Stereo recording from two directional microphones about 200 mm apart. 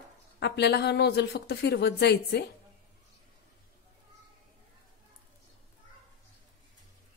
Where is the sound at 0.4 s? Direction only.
55° left (ahead or behind).